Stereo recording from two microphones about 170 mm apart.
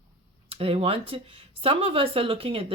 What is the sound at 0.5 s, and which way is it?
Speech, 35° right (ahead or behind).